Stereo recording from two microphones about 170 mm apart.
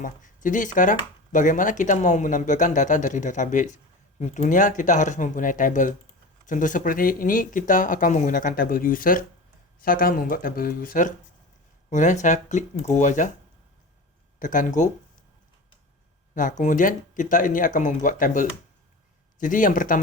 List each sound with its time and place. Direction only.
0.0 s speech: 50° left (ahead or behind)
14.3 s speech: 50° left (ahead or behind)
16.3 s speech: 50° left (ahead or behind)